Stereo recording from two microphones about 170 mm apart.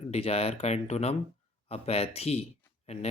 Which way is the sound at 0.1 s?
35° left (ahead or behind).